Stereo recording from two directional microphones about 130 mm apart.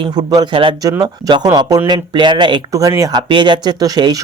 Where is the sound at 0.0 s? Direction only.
30° right (ahead or behind).